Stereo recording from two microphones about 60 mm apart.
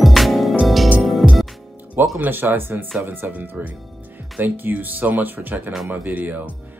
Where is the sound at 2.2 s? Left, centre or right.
Right.